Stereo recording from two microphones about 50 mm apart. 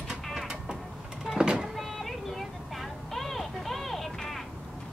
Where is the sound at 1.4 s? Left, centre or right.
Centre.